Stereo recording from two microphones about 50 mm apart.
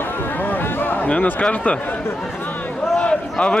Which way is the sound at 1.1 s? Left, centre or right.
Left.